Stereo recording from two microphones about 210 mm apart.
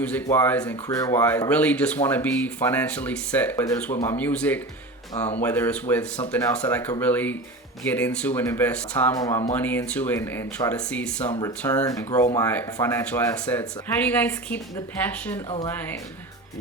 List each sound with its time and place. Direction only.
0.0 s speech: 10° left (ahead or behind)
11.3 s speech: 20° left (ahead or behind)
15.4 s speech: 25° left (ahead or behind)